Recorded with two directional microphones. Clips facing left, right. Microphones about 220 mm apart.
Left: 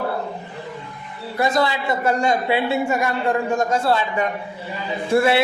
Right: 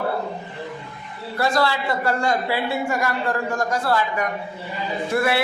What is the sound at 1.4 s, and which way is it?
A woman's voice, 20° left (ahead or behind).